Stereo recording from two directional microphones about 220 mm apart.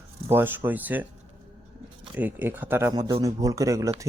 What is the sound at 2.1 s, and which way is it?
Speech, 5° right (ahead or behind).